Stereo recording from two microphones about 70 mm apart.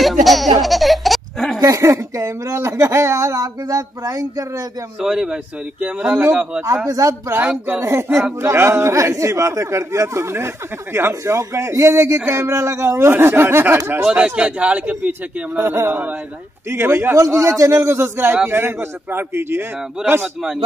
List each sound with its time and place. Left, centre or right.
0.0 s baby laughter: centre
1.6 s speech: right
5.0 s speech: centre
6.9 s speech: right
7.8 s a man's voice: right
14.0 s speech: centre
15.5 s a man's voice: right
16.6 s a man's voice: right
17.2 s a man's voice: right
20.0 s speech: centre